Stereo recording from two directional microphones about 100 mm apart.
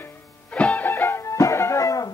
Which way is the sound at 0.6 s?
15° left (ahead or behind).